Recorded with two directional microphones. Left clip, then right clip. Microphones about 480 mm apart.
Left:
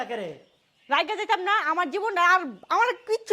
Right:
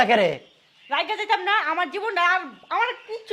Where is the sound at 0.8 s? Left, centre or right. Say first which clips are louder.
Right 1 dB; left.